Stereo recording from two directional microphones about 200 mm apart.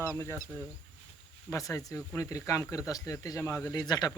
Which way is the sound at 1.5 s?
15° left (ahead or behind).